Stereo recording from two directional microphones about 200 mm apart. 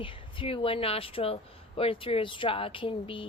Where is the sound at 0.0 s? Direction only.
25° left (ahead or behind).